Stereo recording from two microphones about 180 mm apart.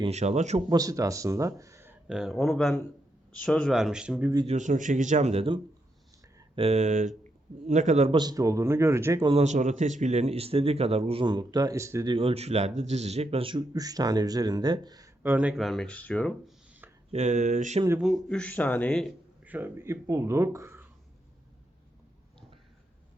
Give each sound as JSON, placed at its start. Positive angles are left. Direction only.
{"t": 0.0, "sound": "speech", "side_deg": -35}
{"t": 0.7, "sound": "speech", "side_deg": -20}
{"t": 4.4, "sound": "speech", "side_deg": -40}
{"t": 6.6, "sound": "speech", "side_deg": -35}
{"t": 8.1, "sound": "speech", "side_deg": -20}
{"t": 9.2, "sound": "speech", "side_deg": -35}
{"t": 12.1, "sound": "speech", "side_deg": -30}
{"t": 15.2, "sound": "speech", "side_deg": -10}
{"t": 17.1, "sound": "speech", "side_deg": -40}
{"t": 18.0, "sound": "speech", "side_deg": 0}
{"t": 19.5, "sound": "speech", "side_deg": -10}